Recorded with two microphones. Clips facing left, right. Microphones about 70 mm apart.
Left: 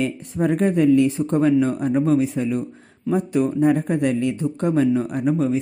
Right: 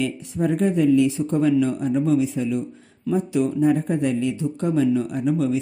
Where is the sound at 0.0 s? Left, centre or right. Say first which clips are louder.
Left 1 dB; left.